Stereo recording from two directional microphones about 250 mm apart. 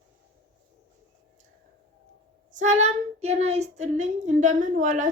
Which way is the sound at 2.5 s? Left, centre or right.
Right.